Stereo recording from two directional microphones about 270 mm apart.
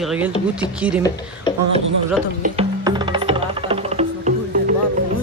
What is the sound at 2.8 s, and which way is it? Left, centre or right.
Music, centre.